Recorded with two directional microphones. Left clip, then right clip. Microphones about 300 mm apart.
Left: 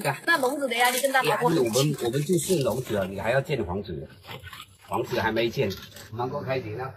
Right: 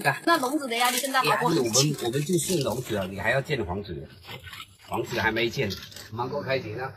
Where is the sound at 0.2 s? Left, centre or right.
Centre.